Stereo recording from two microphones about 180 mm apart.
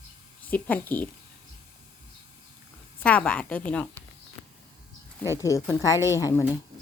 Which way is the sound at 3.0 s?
5° left (ahead or behind).